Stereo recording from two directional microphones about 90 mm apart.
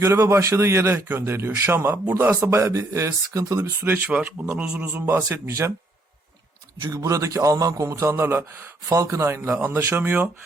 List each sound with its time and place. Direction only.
0.0 s a man's voice: 30° right (ahead or behind)
3.8 s speech: 25° right (ahead or behind)
4.9 s a man's voice: 25° right (ahead or behind)
6.7 s a man's voice: 50° right (ahead or behind)
7.0 s a man's voice: 35° right (ahead or behind)